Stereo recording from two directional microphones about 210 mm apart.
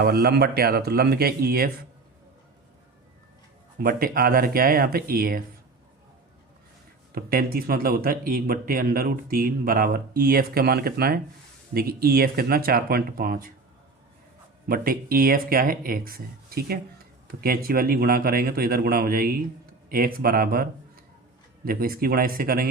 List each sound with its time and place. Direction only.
0.0 s speech: 50° right (ahead or behind)
3.8 s speech: 45° right (ahead or behind)
7.1 s speech: 45° right (ahead or behind)
14.7 s speech: 45° right (ahead or behind)